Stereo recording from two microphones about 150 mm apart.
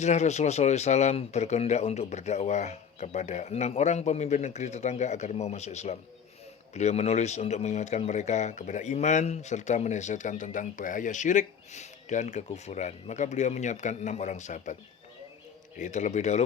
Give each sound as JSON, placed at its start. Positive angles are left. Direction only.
{"t": 0.0, "sound": "speech", "side_deg": 50}
{"t": 15.8, "sound": "speech", "side_deg": 50}